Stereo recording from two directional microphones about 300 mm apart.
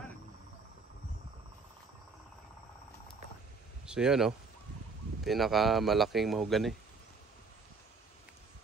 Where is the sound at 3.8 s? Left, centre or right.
Centre.